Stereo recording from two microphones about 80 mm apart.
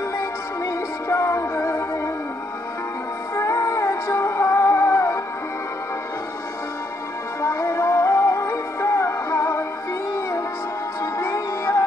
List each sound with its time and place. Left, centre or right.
0.2 s music: left
3.3 s music: left
7.4 s music: left
11.0 s music: left